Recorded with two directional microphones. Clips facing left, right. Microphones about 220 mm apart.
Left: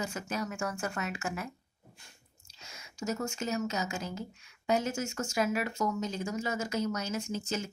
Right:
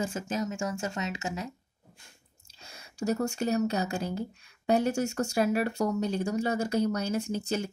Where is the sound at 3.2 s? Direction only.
35° right (ahead or behind).